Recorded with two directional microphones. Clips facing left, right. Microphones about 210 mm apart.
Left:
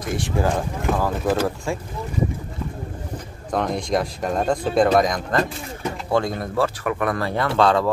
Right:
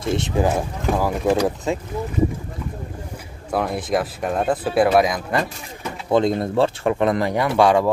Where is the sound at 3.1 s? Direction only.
5° right (ahead or behind).